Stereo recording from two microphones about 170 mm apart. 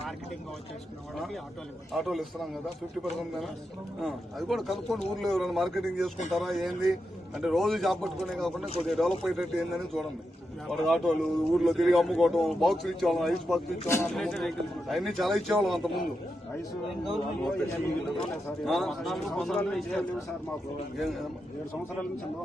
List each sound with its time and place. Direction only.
1.1 s speech: centre (ahead or behind)
13.8 s speech: 15° left (ahead or behind)
14.1 s speech: centre (ahead or behind)
18.6 s speech: centre (ahead or behind)